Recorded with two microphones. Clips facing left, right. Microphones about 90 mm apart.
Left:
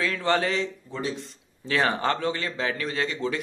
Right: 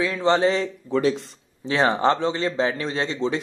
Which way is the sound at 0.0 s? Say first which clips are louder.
Right 5 dB; 20° right (ahead or behind).